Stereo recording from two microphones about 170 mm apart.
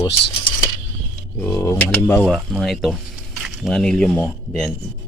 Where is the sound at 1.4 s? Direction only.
15° left (ahead or behind).